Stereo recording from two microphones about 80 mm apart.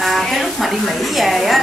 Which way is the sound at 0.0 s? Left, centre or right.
Centre.